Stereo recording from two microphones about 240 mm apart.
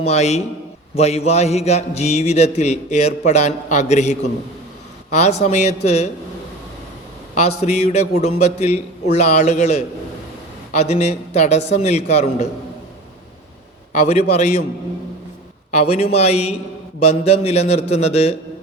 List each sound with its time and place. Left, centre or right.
0.0 s a man's voice: left
7.3 s a man's voice: left
14.1 s a man's voice: left
15.7 s a man's voice: left